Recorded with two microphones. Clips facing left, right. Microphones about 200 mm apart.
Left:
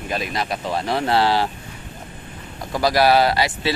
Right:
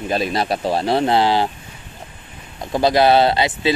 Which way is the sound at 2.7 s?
25° right (ahead or behind).